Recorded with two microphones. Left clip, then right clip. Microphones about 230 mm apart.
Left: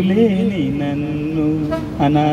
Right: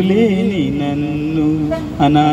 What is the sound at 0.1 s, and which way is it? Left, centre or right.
Mantra, right.